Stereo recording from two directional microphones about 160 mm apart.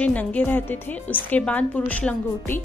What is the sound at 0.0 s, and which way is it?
A woman's voice, 10° left (ahead or behind).